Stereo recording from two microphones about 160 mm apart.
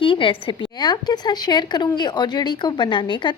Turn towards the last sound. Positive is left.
turn(degrees=30)  # may be behind; listen again after turning